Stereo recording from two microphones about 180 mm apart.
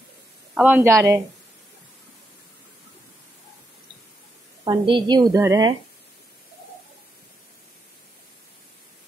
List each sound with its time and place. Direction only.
0.6 s a woman's voice: 10° right (ahead or behind)
4.6 s a woman's voice: 25° right (ahead or behind)